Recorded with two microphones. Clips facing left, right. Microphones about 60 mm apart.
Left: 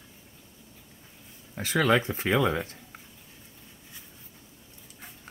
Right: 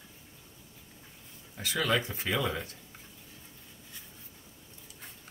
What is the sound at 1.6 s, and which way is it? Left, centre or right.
Speech, left.